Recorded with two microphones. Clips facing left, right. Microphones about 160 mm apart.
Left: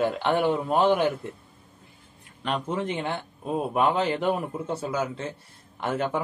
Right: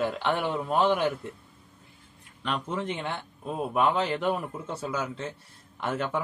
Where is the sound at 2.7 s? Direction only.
5° left (ahead or behind).